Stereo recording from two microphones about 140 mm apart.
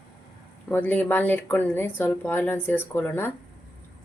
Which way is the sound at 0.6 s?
10° left (ahead or behind).